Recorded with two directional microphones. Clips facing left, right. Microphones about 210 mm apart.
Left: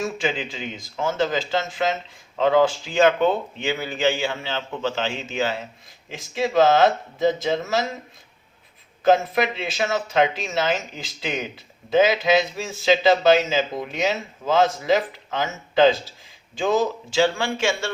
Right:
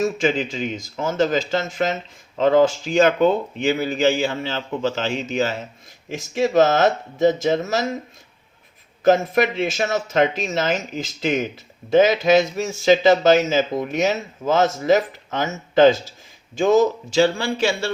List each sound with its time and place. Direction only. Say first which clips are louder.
0.0 s speech: right 5 dB; 45° right (ahead or behind)
9.0 s speech: right 2 dB; 45° right (ahead or behind)